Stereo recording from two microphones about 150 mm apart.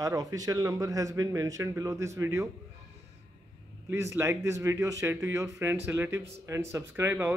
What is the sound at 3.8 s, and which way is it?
Speech, 15° right (ahead or behind).